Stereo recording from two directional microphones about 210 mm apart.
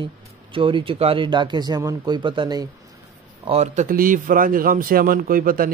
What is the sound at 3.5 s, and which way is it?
Speech, 30° right (ahead or behind).